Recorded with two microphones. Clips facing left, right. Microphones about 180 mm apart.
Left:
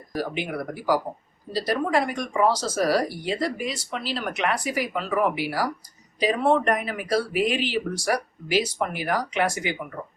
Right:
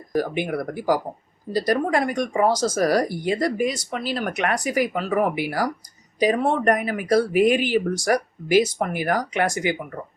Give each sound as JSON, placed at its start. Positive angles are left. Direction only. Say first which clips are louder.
{"t": 0.1, "sound": "speech", "louder": "right 5 dB", "side_deg": -50}